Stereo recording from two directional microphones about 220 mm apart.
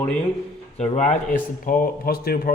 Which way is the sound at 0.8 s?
30° left (ahead or behind).